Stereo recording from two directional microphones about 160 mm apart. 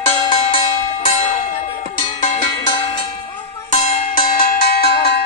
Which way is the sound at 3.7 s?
50° left (ahead or behind).